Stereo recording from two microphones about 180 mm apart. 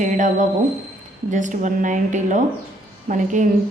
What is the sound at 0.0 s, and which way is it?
A woman's voice, 45° right (ahead or behind).